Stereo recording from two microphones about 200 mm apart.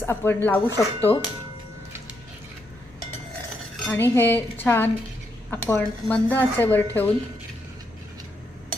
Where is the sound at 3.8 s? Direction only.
10° left (ahead or behind).